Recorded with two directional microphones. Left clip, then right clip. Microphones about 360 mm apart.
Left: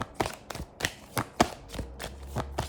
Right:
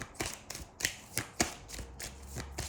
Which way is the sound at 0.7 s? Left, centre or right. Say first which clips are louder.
Left 5 dB; centre.